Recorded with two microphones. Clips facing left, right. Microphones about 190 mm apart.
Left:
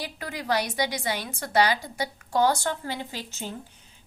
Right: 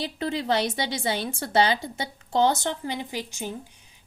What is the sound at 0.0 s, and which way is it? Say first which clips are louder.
A woman's voice: right 6 dB; 25° right (ahead or behind).